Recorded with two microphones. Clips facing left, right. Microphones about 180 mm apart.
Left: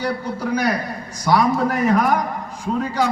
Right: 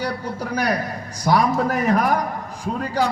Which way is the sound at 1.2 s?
35° right (ahead or behind).